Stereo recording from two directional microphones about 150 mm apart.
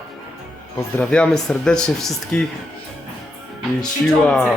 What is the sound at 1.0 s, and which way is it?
A man's voice, 5° left (ahead or behind).